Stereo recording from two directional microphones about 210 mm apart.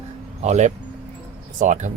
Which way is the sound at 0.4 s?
35° right (ahead or behind).